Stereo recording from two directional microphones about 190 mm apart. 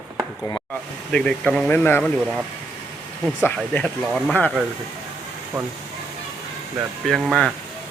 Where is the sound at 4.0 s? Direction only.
Centre (ahead or behind).